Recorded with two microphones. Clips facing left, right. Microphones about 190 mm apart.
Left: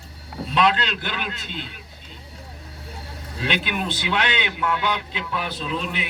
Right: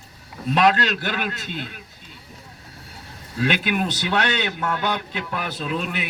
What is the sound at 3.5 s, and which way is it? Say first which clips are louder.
A man's voice: even; 45° right (ahead or behind).